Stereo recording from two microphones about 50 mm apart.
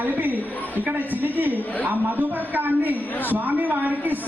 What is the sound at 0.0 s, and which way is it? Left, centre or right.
A woman's voice, right.